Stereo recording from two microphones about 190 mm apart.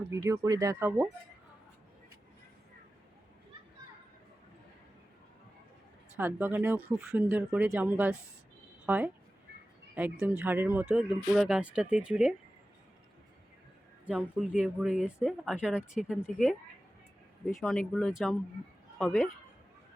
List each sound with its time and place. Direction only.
0.1 s speech: 15° right (ahead or behind)
6.1 s speech: 10° right (ahead or behind)
14.0 s speech: 5° right (ahead or behind)